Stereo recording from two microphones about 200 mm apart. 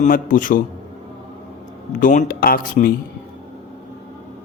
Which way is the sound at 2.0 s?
40° left (ahead or behind).